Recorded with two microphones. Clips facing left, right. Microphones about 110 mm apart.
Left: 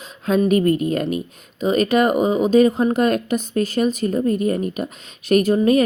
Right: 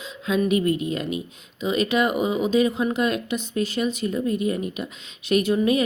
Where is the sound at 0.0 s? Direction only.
45° left (ahead or behind).